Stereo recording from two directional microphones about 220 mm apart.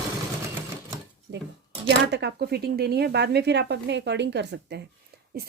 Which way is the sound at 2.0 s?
50° right (ahead or behind).